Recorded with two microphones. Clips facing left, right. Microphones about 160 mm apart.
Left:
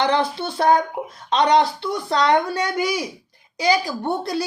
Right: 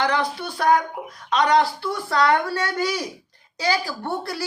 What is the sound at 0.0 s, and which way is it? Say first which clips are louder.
Speech: left 3 dB; 25° left (ahead or behind).